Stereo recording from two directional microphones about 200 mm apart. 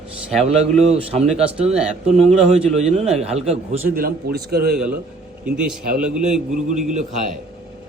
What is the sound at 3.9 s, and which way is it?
Speech, 45° right (ahead or behind).